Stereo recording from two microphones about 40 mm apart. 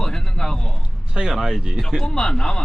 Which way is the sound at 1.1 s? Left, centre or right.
Centre.